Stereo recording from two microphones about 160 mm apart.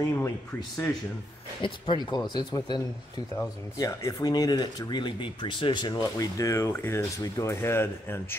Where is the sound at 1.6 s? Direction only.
30° left (ahead or behind).